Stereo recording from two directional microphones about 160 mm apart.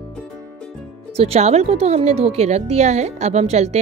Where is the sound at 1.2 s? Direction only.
40° right (ahead or behind).